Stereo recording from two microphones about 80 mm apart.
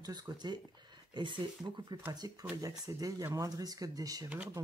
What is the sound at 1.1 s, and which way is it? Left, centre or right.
Speech, right.